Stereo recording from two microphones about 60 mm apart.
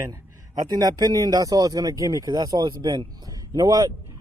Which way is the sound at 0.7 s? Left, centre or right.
Right.